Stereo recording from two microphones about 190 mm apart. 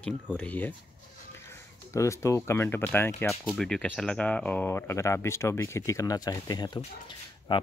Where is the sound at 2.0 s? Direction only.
15° left (ahead or behind).